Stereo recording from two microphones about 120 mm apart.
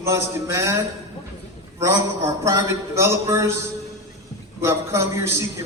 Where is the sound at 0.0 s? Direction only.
25° right (ahead or behind).